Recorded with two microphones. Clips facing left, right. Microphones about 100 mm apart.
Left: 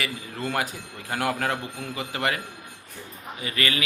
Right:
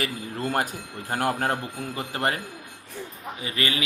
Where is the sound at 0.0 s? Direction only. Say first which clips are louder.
Right 2 dB; 45° right (ahead or behind).